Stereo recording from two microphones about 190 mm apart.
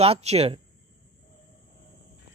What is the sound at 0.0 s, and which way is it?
Speech, 35° right (ahead or behind).